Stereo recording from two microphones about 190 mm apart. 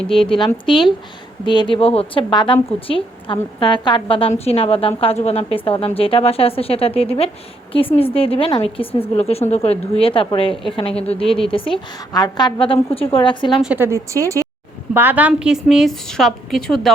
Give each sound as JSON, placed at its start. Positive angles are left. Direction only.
{"t": 0.1, "sound": "a woman's voice", "side_deg": 30}
{"t": 10.5, "sound": "a woman's voice", "side_deg": 0}
{"t": 10.8, "sound": "a woman's voice", "side_deg": 30}
{"t": 13.6, "sound": "a woman's voice", "side_deg": -10}